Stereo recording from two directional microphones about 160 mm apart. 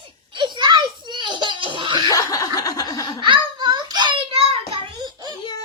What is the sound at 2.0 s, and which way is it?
Snicker, 20° left (ahead or behind).